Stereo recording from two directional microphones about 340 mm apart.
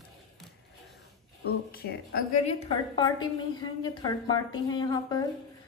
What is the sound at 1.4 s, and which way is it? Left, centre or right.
A woman's voice, left.